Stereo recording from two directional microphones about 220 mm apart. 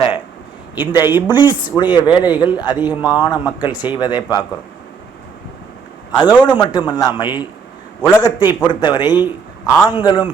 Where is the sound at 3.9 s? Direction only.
20° left (ahead or behind).